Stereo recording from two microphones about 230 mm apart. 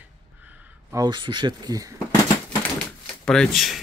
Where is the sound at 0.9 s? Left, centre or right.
Centre.